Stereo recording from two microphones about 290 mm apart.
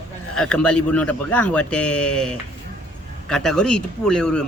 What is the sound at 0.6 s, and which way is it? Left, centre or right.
Speech, centre.